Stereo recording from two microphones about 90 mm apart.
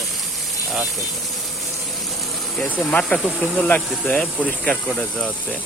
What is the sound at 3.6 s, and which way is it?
Speech, 15° left (ahead or behind).